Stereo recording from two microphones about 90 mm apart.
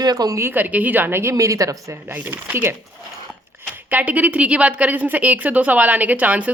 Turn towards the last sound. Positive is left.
turn(degrees=-15)  # may be behind; listen again after turning